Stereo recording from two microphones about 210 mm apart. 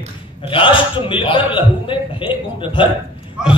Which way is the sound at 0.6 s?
25° left (ahead or behind).